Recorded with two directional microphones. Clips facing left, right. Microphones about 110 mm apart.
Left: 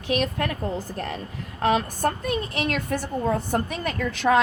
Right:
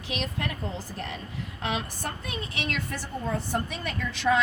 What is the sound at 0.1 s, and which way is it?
A woman's voice, 50° left (ahead or behind).